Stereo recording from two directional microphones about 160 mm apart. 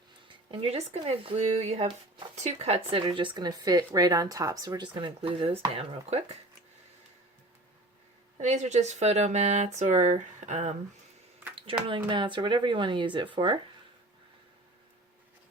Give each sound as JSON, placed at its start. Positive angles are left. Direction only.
{"t": 0.5, "sound": "speech", "side_deg": -40}
{"t": 8.4, "sound": "speech", "side_deg": -45}
{"t": 11.9, "sound": "speech", "side_deg": -30}